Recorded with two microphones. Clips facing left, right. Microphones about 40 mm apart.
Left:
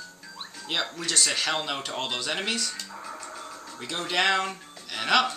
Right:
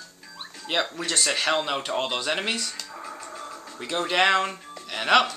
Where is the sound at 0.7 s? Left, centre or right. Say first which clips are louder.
Right 3 dB; centre.